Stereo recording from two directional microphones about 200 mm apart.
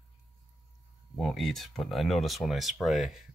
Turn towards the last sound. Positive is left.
turn(degrees=0)  # may be behind; listen again after turning